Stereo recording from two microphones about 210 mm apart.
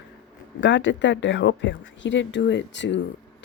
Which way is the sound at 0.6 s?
60° left (ahead or behind).